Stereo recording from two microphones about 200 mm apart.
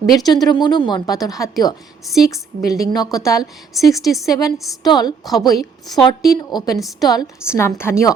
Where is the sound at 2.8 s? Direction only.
20° left (ahead or behind).